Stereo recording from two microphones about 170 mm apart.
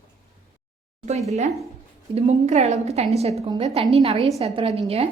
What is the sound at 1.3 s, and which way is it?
A woman's voice, 40° right (ahead or behind).